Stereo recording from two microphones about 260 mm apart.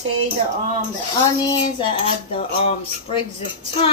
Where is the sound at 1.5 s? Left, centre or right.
Centre.